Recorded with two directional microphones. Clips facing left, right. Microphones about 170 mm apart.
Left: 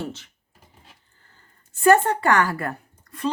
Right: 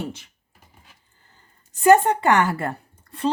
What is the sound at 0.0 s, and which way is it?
Computer keyboard, 15° right (ahead or behind).